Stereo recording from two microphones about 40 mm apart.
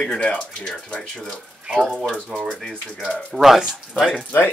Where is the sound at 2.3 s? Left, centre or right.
Centre.